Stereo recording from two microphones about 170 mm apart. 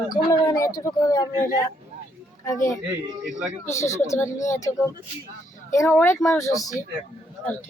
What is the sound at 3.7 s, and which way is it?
Speech, 15° left (ahead or behind).